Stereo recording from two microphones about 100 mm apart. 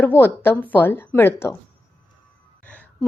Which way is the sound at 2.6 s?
15° left (ahead or behind).